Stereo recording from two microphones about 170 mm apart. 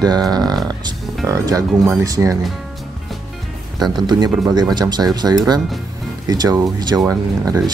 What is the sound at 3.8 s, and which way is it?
Speech, 25° right (ahead or behind).